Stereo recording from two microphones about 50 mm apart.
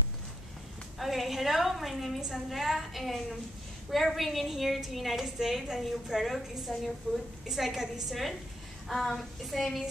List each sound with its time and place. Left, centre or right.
0.9 s a woman's voice: centre
6.3 s a woman's voice: centre
7.1 s a woman's voice: right
7.4 s a woman's voice: centre